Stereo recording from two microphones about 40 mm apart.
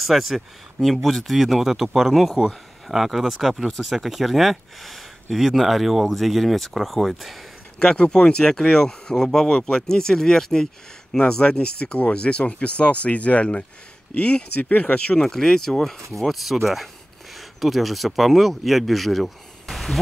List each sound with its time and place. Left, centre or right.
0.0 s speech: centre
7.8 s speech: left
11.4 s speech: left
15.2 s speech: centre